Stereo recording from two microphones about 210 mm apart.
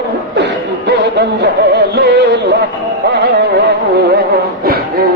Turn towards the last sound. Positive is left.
turn(degrees=-55)  # may be behind; listen again after turning